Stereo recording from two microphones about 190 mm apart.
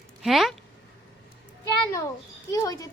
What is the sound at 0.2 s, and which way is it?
Speech, centre (ahead or behind).